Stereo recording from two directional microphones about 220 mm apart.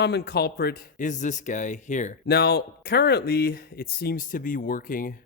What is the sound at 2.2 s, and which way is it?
Speech, 45° left (ahead or behind).